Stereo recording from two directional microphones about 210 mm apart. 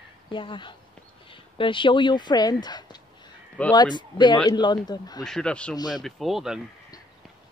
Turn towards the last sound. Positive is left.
turn(degrees=0)  # may be behind; listen again after turning